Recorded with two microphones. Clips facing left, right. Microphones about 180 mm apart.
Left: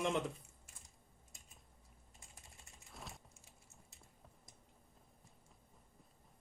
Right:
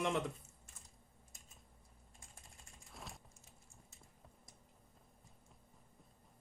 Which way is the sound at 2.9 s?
Centre (ahead or behind).